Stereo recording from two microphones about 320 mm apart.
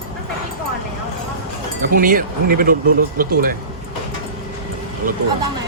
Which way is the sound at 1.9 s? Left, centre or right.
Right.